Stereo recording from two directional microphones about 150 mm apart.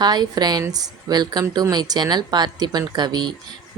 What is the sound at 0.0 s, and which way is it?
Speech, 25° right (ahead or behind).